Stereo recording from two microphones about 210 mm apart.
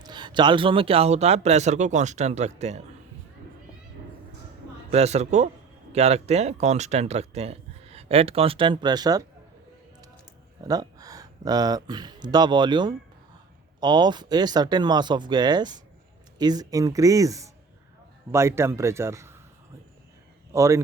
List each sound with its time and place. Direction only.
0.0 s speech: 20° right (ahead or behind)
4.9 s speech: 30° right (ahead or behind)
10.6 s speech: 15° right (ahead or behind)
20.5 s speech: 15° right (ahead or behind)